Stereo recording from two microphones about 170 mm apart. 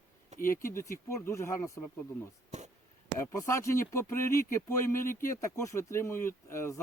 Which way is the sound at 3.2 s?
20° left (ahead or behind).